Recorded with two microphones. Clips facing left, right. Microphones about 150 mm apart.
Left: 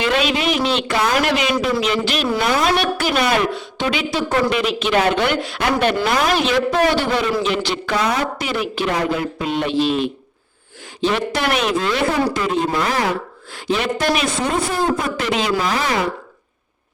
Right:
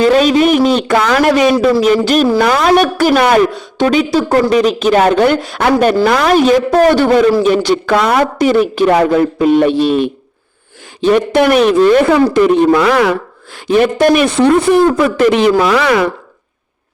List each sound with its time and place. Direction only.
0.0 s a man's voice: 40° right (ahead or behind)
0.9 s a woman's voice: 70° right (ahead or behind)
1.2 s a man's voice: 45° right (ahead or behind)
2.4 s a woman's voice: 70° right (ahead or behind)
2.6 s a man's voice: 45° right (ahead or behind)
6.1 s speech: 60° right (ahead or behind)
6.5 s a man's voice: 40° right (ahead or behind)
7.9 s a woman's voice: 75° right (ahead or behind)
8.4 s a man's voice: 45° right (ahead or behind)
8.9 s speech: 65° right (ahead or behind)
9.1 s a man's voice: 50° right (ahead or behind)
11.0 s a man's voice: 55° right (ahead or behind)
12.0 s speech: 65° right (ahead or behind)
15.2 s a woman's voice: 55° right (ahead or behind); by 16.0 s 75° right (ahead or behind)